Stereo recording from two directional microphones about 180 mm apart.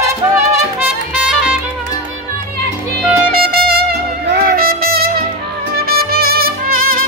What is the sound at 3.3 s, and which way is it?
Music, 55° right (ahead or behind).